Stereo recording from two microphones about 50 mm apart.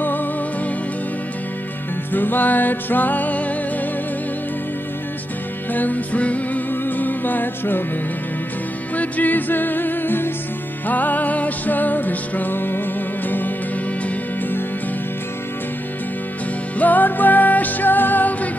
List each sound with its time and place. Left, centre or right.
0.0 s music: left
2.1 s music: left
5.7 s music: left
6.7 s music: left
8.9 s music: left
16.7 s music: left